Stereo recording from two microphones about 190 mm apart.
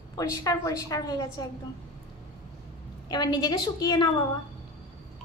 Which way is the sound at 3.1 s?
20° left (ahead or behind).